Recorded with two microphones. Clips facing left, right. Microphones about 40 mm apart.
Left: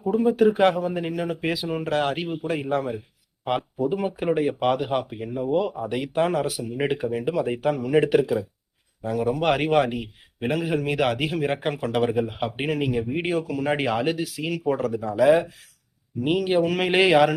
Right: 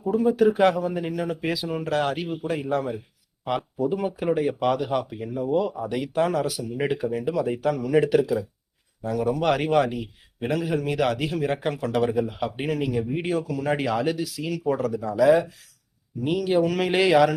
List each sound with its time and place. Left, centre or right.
0.0 s a man's voice: centre